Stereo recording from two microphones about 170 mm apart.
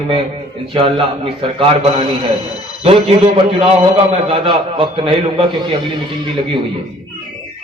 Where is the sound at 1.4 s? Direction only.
30° right (ahead or behind).